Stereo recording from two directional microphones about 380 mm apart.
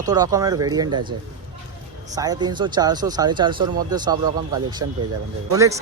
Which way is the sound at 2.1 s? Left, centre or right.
Centre.